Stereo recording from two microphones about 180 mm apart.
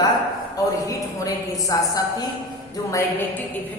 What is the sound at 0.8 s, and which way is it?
A woman's voice, 20° left (ahead or behind).